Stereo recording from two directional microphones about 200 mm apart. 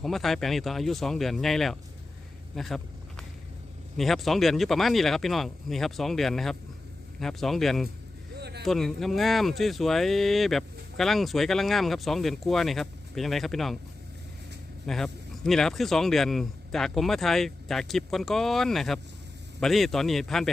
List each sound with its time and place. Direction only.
0.0 s speech: centre (ahead or behind)
2.6 s a sound: centre (ahead or behind)
3.9 s speech: centre (ahead or behind)
8.4 s a sound: 55° right (ahead or behind)
8.6 s speech: centre (ahead or behind)
14.8 s speech: centre (ahead or behind)